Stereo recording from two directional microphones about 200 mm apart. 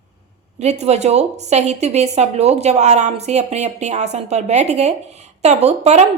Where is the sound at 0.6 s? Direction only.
35° right (ahead or behind).